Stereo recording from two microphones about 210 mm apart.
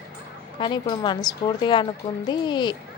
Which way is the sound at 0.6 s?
20° left (ahead or behind).